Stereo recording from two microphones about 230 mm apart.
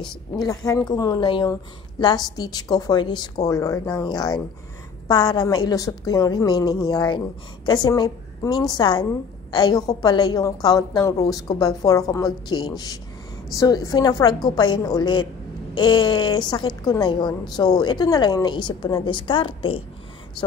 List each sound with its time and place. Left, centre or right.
0.4 s a woman's voice: centre